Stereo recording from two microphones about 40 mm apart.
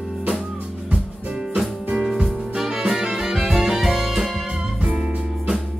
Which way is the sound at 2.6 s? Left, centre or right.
Centre.